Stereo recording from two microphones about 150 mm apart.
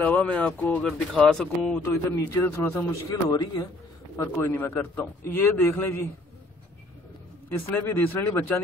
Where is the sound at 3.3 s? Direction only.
25° left (ahead or behind).